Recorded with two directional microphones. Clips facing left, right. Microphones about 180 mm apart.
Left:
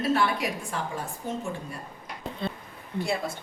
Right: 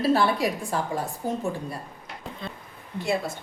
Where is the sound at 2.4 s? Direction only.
30° left (ahead or behind).